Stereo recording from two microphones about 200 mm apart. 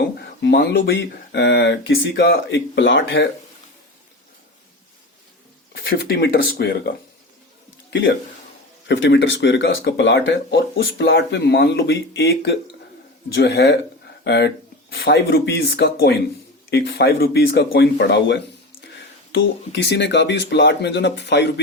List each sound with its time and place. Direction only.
0.2 s speech: 55° left (ahead or behind)
5.9 s speech: 50° left (ahead or behind)
8.9 s speech: 65° left (ahead or behind)